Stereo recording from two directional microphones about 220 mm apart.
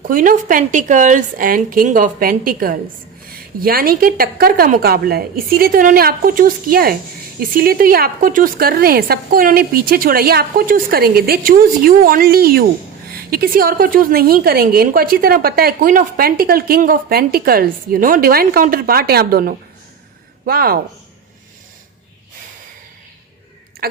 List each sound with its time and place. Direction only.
0.1 s a woman's voice: 40° right (ahead or behind)